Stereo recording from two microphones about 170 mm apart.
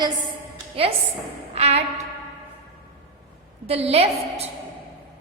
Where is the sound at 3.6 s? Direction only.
35° right (ahead or behind).